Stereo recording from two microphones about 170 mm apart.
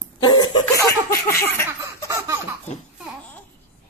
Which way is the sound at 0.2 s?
25° left (ahead or behind).